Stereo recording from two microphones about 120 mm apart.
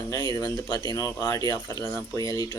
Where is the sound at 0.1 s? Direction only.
35° left (ahead or behind).